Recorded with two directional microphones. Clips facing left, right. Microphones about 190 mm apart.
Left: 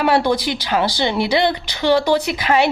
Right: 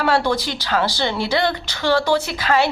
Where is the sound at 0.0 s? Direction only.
15° left (ahead or behind).